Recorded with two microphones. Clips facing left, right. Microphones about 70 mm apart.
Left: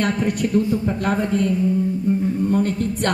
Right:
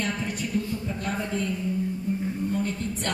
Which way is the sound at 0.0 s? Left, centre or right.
Left.